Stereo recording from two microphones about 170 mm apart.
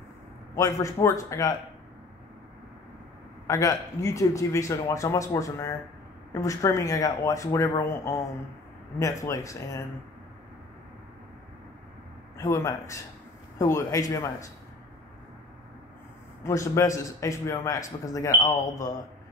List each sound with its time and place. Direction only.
0.6 s a man's voice: 20° left (ahead or behind)
3.4 s a man's voice: 20° left (ahead or behind)
12.4 s a man's voice: 15° left (ahead or behind)
16.4 s a man's voice: 15° left (ahead or behind)